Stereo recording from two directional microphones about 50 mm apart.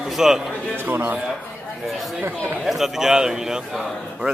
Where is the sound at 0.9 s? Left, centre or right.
Right.